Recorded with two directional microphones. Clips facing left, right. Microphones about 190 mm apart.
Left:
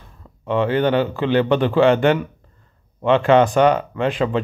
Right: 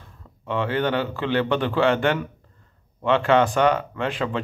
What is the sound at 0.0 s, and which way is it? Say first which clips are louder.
A man's voice: left 4 dB; 20° left (ahead or behind).